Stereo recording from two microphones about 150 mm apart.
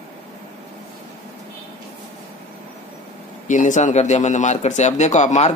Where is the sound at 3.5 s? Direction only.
55° left (ahead or behind).